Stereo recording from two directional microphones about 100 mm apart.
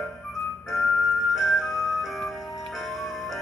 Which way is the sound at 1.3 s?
Centre (ahead or behind).